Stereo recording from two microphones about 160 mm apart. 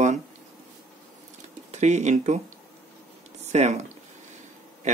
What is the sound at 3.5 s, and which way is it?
Speech, 45° right (ahead or behind).